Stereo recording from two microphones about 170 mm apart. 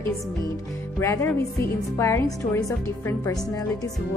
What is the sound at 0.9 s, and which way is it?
A woman's voice, 15° left (ahead or behind).